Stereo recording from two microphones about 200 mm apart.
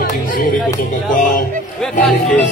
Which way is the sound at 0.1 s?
45° left (ahead or behind).